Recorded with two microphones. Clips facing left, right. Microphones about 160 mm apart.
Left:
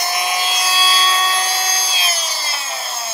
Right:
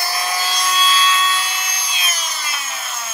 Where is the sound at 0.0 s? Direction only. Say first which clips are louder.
Left 2 dB; 20° left (ahead or behind).